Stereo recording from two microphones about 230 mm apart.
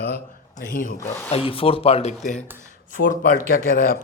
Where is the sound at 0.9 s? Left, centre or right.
Centre.